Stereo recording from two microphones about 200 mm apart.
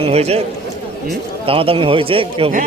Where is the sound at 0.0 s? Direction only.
30° right (ahead or behind).